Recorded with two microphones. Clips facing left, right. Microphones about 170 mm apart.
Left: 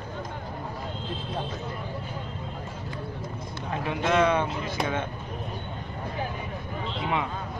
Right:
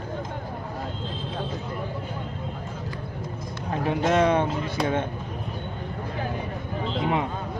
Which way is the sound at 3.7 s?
40° right (ahead or behind).